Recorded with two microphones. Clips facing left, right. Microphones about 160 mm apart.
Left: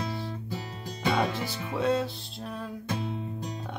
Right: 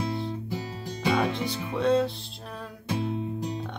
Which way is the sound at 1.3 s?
Centre (ahead or behind).